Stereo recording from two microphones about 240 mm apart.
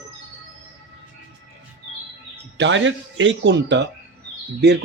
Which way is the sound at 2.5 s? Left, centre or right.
Right.